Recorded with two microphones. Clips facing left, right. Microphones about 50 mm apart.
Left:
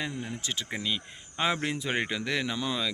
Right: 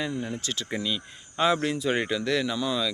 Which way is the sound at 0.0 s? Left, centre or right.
Centre.